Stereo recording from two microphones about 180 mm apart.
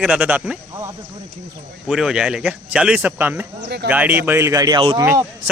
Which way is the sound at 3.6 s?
65° right (ahead or behind).